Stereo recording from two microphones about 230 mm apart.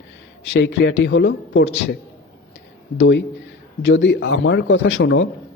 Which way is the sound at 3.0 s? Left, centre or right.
Left.